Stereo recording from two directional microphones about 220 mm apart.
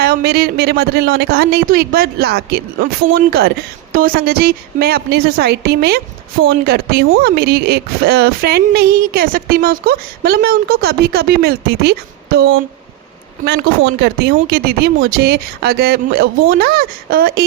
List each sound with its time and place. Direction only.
0.0 s speech: 45° right (ahead or behind)
14.0 s speech: 45° right (ahead or behind)